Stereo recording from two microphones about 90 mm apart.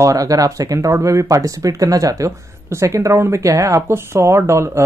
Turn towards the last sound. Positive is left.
turn(degrees=-30)  # may be behind; listen again after turning